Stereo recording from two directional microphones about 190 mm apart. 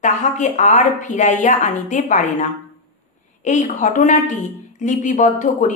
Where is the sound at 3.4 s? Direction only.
40° left (ahead or behind).